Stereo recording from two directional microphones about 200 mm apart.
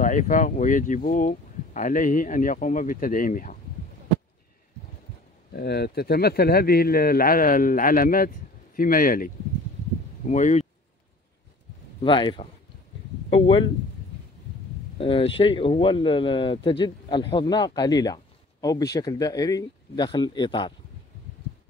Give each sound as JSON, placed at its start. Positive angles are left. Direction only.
{"t": 0.0, "sound": "speech", "side_deg": 40}
{"t": 5.5, "sound": "speech", "side_deg": 55}
{"t": 12.0, "sound": "speech", "side_deg": 25}
{"t": 15.0, "sound": "speech", "side_deg": 25}